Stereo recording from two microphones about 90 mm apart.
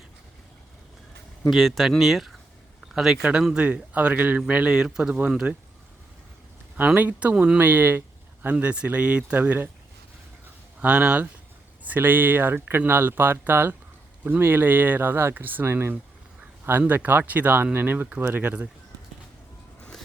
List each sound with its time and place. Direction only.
1.5 s speech: centre (ahead or behind)
6.7 s speech: 20° right (ahead or behind)
7.6 s a sound: 25° right (ahead or behind)
8.5 s speech: 10° right (ahead or behind)
10.8 s speech: 15° right (ahead or behind)